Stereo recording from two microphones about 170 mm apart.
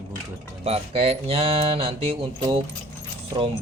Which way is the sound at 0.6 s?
35° right (ahead or behind).